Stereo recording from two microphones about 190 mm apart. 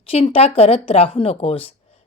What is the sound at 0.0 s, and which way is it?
A woman's voice, 30° left (ahead or behind).